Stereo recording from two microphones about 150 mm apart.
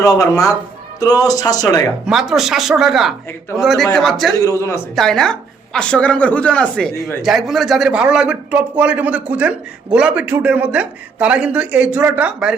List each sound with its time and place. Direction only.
0.0 s speech: 20° left (ahead or behind)
2.0 s speech: centre (ahead or behind)
4.4 s speech: 20° left (ahead or behind)
4.9 s a woman's voice: 5° left (ahead or behind)